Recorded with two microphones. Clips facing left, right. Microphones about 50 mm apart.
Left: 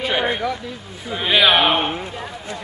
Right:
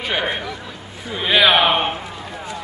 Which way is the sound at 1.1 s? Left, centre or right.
Centre.